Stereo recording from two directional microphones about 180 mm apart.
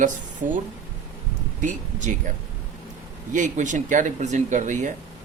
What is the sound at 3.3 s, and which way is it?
Speech, 45° right (ahead or behind).